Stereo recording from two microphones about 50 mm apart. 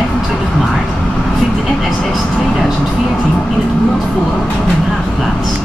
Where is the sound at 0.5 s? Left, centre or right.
Centre.